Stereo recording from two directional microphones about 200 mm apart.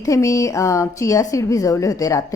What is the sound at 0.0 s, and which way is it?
A woman's voice, 15° left (ahead or behind).